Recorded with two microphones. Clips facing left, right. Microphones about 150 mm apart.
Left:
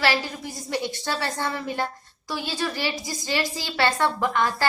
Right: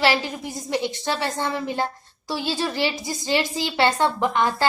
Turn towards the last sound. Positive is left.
turn(degrees=-20)  # may be behind; listen again after turning